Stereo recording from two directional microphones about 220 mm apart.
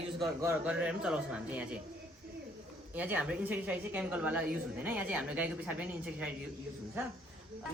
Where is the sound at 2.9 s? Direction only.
5° right (ahead or behind).